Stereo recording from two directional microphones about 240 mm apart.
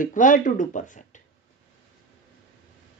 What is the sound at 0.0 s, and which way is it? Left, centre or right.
Speech, left.